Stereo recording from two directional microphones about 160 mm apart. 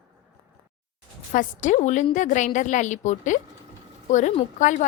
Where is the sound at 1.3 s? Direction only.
50° left (ahead or behind).